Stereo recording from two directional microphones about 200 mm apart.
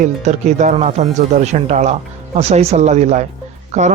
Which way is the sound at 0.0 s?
35° right (ahead or behind).